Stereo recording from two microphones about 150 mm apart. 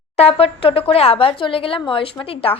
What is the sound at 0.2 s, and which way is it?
A woman's voice, 40° left (ahead or behind).